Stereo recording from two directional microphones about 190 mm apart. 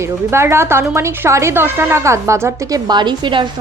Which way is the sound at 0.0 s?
15° right (ahead or behind).